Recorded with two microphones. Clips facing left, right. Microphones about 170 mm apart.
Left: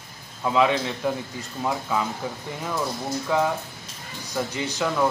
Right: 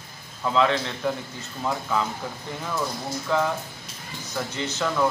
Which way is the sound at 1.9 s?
10° left (ahead or behind).